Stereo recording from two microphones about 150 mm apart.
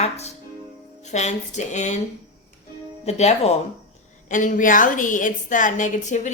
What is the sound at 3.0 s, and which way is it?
Speech, 45° left (ahead or behind).